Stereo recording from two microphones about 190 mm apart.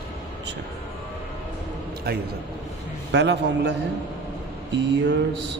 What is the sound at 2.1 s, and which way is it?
Speech, 55° right (ahead or behind).